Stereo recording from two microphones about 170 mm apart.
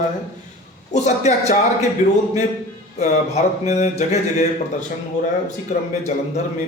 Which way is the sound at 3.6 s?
40° left (ahead or behind).